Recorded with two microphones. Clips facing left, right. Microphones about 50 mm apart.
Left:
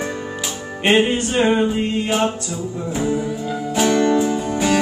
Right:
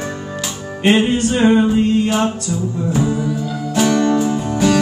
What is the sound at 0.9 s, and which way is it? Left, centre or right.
Music, centre.